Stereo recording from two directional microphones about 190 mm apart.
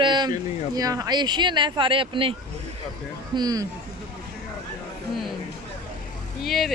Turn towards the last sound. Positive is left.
turn(degrees=0)  # may be behind; listen again after turning